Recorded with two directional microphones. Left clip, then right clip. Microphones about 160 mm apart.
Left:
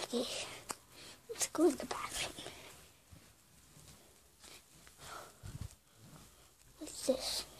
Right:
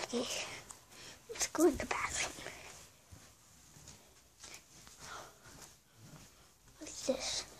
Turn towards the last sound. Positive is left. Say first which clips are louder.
# left 1 dB
turn(degrees=20)  # may be behind; listen again after turning